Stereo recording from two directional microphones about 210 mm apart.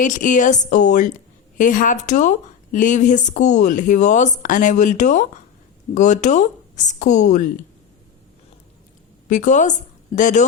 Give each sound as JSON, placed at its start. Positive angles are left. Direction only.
{"t": 0.0, "sound": "speech", "side_deg": 40}
{"t": 9.3, "sound": "speech", "side_deg": 35}